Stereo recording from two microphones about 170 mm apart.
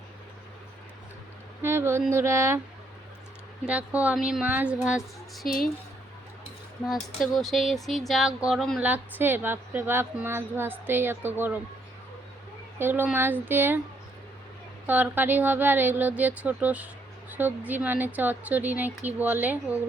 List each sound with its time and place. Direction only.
1.6 s a woman's voice: 15° right (ahead or behind)
3.7 s a woman's voice: 10° right (ahead or behind)
7.2 s speech: centre (ahead or behind)
8.9 s a woman's voice: 10° right (ahead or behind)
12.8 s a woman's voice: 10° right (ahead or behind)
14.8 s a woman's voice: 10° right (ahead or behind)